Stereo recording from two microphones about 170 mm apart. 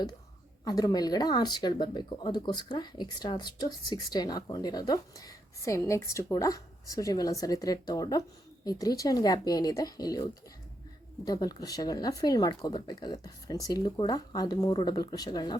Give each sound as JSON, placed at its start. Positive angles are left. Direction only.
{"t": 0.6, "sound": "speech", "side_deg": 20}
{"t": 11.3, "sound": "speech", "side_deg": 20}